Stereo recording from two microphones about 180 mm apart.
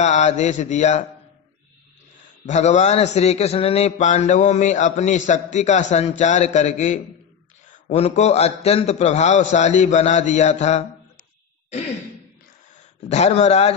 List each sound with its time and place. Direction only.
0.0 s a man's voice: 40° left (ahead or behind)
2.4 s a man's voice: 40° left (ahead or behind)
13.1 s a man's voice: 40° left (ahead or behind)